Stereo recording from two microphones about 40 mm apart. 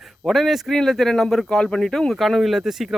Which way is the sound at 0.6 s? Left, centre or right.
Centre.